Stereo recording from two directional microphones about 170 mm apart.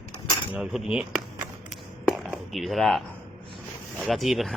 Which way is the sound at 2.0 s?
Centre (ahead or behind).